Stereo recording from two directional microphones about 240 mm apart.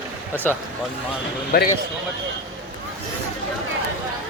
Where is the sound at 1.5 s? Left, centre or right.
Left.